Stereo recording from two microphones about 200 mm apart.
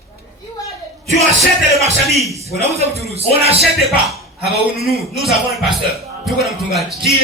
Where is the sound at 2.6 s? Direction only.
30° right (ahead or behind).